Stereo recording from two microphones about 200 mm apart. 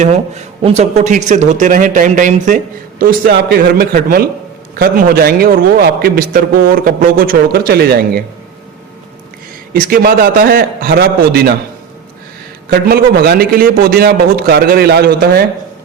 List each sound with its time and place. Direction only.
0.0 s a man's voice: 35° right (ahead or behind); by 8.2 s 50° right (ahead or behind)
9.7 s a man's voice: 45° right (ahead or behind)
12.7 s a man's voice: 50° right (ahead or behind)